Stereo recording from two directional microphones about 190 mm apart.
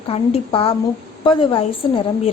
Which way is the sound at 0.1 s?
30° left (ahead or behind).